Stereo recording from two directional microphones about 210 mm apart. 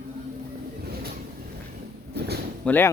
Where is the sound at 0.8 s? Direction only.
50° right (ahead or behind).